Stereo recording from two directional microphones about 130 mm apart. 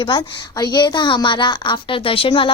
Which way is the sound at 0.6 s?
30° left (ahead or behind).